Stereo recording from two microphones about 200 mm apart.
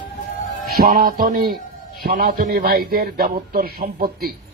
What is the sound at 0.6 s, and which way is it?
Speech, 50° right (ahead or behind).